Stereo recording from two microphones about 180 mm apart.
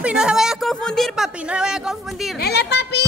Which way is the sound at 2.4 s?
65° left (ahead or behind).